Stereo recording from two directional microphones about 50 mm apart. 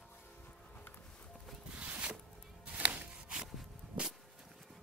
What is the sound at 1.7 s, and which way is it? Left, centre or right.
Zipper, right.